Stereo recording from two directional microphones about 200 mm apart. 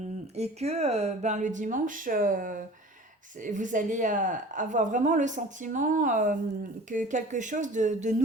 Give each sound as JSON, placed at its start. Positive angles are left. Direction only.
{"t": 0.3, "sound": "a woman's voice", "side_deg": -30}